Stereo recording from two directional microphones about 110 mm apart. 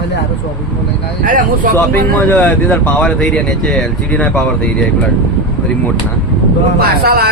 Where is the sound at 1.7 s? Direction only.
15° left (ahead or behind).